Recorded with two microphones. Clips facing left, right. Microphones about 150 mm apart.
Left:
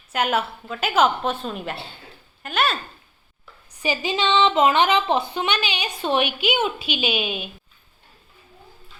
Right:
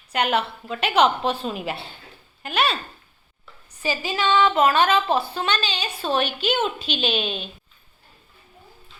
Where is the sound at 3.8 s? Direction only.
20° left (ahead or behind).